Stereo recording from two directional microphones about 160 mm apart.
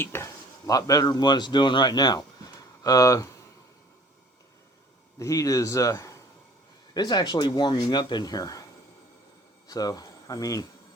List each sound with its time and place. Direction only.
0.0 s speech: 15° left (ahead or behind)
5.2 s speech: 20° left (ahead or behind)
9.6 s speech: 25° left (ahead or behind)